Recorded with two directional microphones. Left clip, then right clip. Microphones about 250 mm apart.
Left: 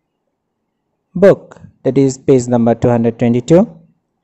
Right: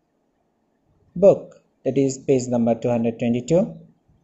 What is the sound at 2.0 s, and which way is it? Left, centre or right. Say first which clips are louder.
Speech: left 8 dB; left.